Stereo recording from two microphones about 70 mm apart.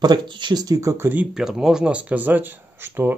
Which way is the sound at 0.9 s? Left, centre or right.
Right.